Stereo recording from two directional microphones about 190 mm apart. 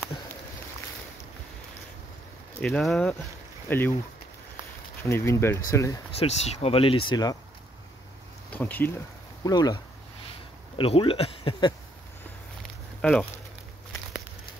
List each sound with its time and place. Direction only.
2.6 s speech: centre (ahead or behind)
5.0 s speech: 15° left (ahead or behind)
6.1 s speech: 35° left (ahead or behind)
8.5 s speech: 10° left (ahead or behind)
9.4 s speech: 20° left (ahead or behind)
10.8 s speech: 30° left (ahead or behind)
13.0 s speech: 10° left (ahead or behind)